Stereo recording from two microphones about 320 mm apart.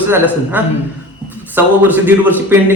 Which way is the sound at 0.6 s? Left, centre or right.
Centre.